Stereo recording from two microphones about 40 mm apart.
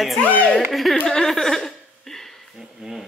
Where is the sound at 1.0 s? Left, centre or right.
Centre.